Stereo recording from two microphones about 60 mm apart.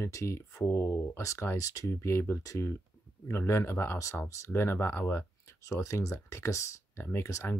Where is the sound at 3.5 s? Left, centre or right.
Left.